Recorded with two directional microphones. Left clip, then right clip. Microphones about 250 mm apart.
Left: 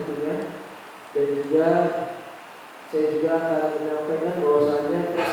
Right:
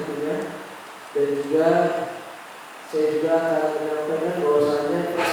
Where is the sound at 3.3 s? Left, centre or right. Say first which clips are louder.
Right 2 dB; centre.